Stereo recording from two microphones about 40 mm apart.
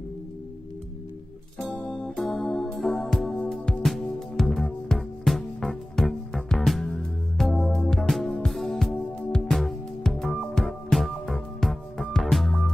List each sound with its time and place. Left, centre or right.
1.8 s music: centre